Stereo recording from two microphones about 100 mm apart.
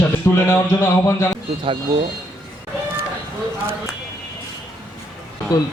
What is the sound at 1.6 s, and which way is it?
Speech, 60° right (ahead or behind).